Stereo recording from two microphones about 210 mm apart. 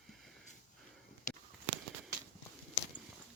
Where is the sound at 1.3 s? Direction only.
35° left (ahead or behind).